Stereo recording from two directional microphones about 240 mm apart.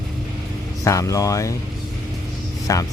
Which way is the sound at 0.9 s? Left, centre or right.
Centre.